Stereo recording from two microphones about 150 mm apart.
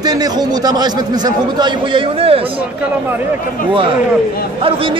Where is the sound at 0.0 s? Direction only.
25° right (ahead or behind).